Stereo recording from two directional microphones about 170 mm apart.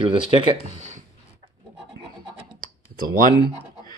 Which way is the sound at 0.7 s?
45° right (ahead or behind).